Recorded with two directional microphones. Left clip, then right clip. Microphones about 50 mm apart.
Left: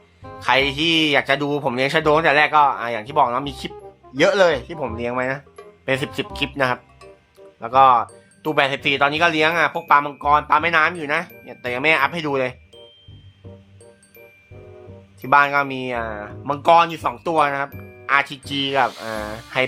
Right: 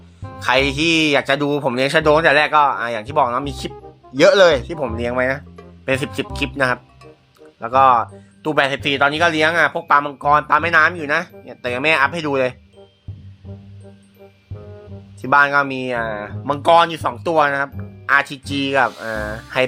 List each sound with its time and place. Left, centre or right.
0.3 s speech: right
3.2 s speech: centre
4.1 s speech: right
4.4 s speech: right
5.1 s speech: right
5.9 s speech: centre
7.6 s speech: right
11.1 s speech: right
11.6 s speech: right
15.2 s speech: right
16.5 s speech: right
17.2 s speech: right
18.0 s speech: right
18.9 s speech: centre